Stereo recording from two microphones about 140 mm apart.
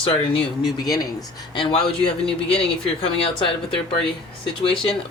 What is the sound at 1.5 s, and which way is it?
Speech, 35° left (ahead or behind).